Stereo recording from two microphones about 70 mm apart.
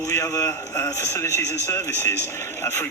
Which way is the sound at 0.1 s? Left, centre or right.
Left.